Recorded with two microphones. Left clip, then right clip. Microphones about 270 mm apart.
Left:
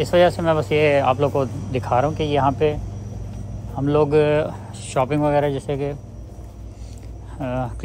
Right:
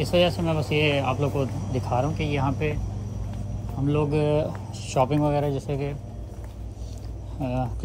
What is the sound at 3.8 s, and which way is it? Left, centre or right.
Speech, centre.